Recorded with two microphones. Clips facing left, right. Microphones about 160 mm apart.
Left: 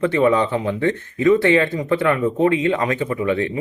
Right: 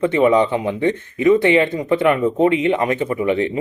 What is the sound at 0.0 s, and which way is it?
Speech, 20° right (ahead or behind).